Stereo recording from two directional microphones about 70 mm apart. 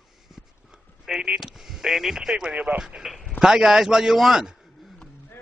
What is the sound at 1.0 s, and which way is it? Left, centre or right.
A man's voice, centre.